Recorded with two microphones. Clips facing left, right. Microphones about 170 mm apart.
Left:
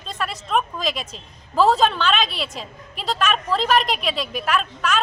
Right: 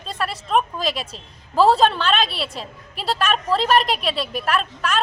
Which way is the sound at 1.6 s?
30° right (ahead or behind).